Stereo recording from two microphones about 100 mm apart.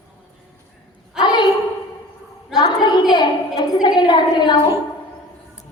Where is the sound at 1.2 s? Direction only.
50° left (ahead or behind).